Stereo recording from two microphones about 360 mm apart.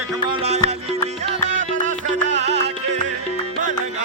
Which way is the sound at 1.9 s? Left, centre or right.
Right.